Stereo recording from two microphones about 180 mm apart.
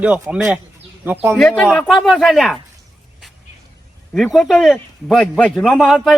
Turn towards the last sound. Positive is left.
turn(degrees=0)  # may be behind; listen again after turning